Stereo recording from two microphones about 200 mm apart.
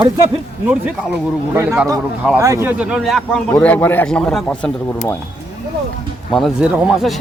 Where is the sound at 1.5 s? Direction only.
15° right (ahead or behind); by 5.1 s 5° left (ahead or behind).